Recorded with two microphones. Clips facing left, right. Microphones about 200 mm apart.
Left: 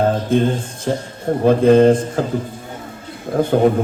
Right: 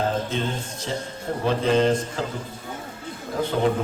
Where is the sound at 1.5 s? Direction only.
50° left (ahead or behind).